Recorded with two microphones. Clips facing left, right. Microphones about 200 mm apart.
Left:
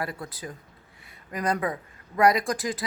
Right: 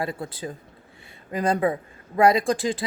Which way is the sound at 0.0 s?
25° right (ahead or behind).